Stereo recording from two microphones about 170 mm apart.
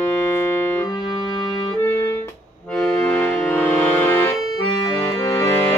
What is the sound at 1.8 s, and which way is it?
Keyboard, 15° left (ahead or behind).